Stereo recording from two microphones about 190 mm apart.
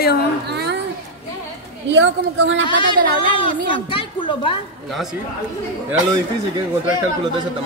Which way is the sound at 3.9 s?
25° left (ahead or behind).